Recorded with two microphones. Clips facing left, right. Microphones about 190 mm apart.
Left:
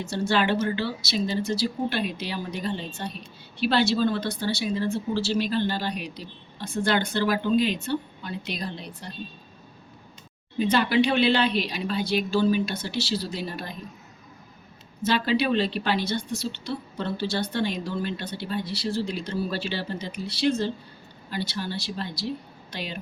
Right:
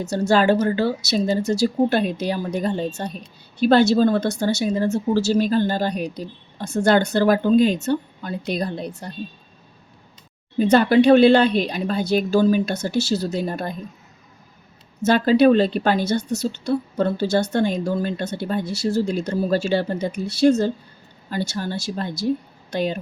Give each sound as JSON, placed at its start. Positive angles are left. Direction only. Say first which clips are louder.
{"t": 0.1, "sound": "a woman's voice", "louder": "right 7 dB", "side_deg": -40}
{"t": 10.6, "sound": "a woman's voice", "louder": "right 7 dB", "side_deg": -45}
{"t": 15.0, "sound": "a woman's voice", "louder": "right 9 dB", "side_deg": -45}